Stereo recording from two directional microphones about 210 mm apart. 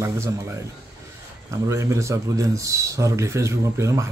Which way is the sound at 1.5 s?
15° right (ahead or behind).